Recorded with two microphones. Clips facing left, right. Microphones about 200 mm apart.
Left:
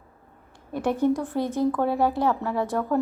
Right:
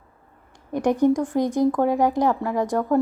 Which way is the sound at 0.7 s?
15° right (ahead or behind).